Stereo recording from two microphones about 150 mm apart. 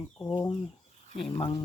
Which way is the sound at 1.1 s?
40° left (ahead or behind).